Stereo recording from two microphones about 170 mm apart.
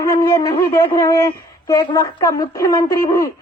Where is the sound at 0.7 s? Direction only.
15° left (ahead or behind).